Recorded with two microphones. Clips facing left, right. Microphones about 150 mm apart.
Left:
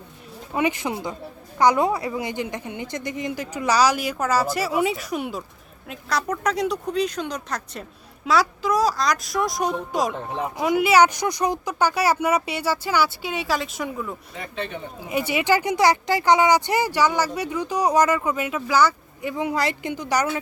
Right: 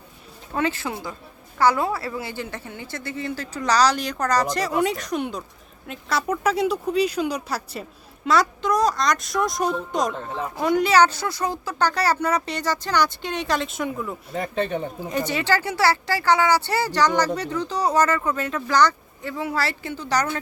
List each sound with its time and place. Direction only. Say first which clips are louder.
0.5 s speech: left 2 dB; 15° left (ahead or behind)
10.1 s speech: left 1 dB; 15° left (ahead or behind); by 14.2 s centre (ahead or behind)
14.3 s speech: right 9 dB; 40° right (ahead or behind)
15.1 s speech: left 2 dB; 10° left (ahead or behind)